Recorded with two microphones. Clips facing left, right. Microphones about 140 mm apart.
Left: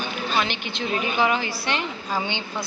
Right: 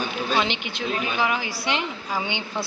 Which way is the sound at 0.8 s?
Centre (ahead or behind).